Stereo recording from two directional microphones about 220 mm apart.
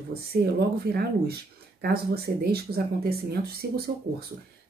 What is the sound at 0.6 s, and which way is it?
Speech, 45° right (ahead or behind).